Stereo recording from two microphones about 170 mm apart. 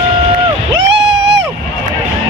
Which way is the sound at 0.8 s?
90° right.